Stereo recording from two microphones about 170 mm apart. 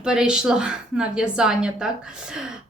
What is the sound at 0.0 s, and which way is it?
A woman's voice, 5° right (ahead or behind).